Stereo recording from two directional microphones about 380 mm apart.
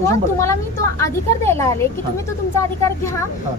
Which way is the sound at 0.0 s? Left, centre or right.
Centre.